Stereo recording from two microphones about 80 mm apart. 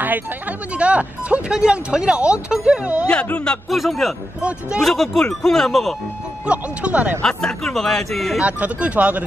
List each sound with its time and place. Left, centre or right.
0.0 s speech: right
3.1 s speech: centre
3.6 s speech: centre
4.4 s speech: centre
4.8 s speech: centre
6.4 s speech: centre
7.2 s speech: centre
8.4 s speech: centre